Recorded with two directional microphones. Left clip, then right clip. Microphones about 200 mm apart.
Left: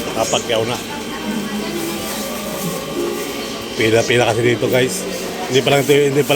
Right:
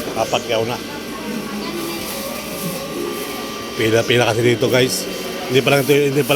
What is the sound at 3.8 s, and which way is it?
Speech, 5° right (ahead or behind).